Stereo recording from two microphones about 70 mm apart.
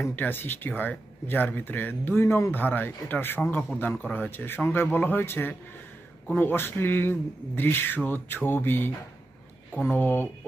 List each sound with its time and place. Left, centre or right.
0.2 s speech: left